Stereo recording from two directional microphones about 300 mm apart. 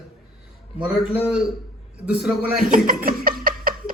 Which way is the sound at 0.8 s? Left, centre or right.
Centre.